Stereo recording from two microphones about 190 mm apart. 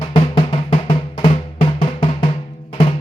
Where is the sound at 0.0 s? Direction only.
30° left (ahead or behind).